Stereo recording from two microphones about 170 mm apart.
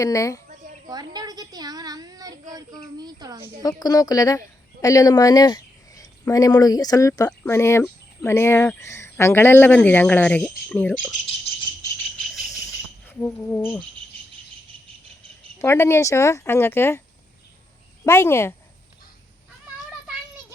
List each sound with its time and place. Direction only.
0.0 s speech: 20° left (ahead or behind)
0.9 s a child's voice: 25° right (ahead or behind)
3.6 s a woman's voice: 20° left (ahead or behind)
13.1 s insect: 15° left (ahead or behind)
15.5 s a woman's voice: 15° left (ahead or behind)
18.0 s a woman's voice: 15° left (ahead or behind)